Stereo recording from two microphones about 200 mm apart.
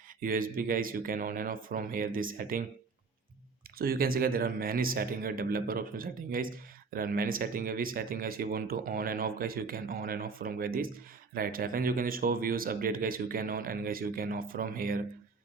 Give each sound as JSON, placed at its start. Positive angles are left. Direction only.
{"t": 0.2, "sound": "speech", "side_deg": -45}
{"t": 3.8, "sound": "speech", "side_deg": -50}